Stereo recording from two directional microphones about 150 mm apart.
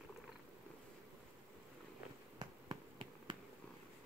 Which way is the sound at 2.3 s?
30° right (ahead or behind).